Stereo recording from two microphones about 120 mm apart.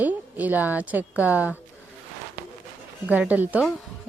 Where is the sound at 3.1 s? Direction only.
10° right (ahead or behind).